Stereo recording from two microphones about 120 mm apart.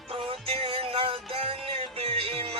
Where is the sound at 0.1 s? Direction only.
55° right (ahead or behind).